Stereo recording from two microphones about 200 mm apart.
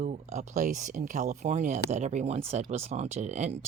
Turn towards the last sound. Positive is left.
turn(degrees=-35)  # may be behind; listen again after turning